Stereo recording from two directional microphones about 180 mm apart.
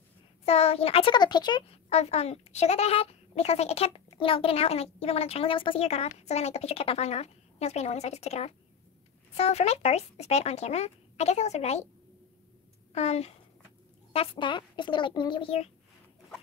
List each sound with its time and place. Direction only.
0.5 s a woman's voice: 35° left (ahead or behind)
1.9 s a woman's voice: 35° left (ahead or behind)
12.9 s a woman's voice: 35° left (ahead or behind)